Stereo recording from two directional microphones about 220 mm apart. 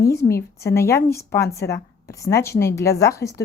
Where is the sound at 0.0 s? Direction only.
15° left (ahead or behind).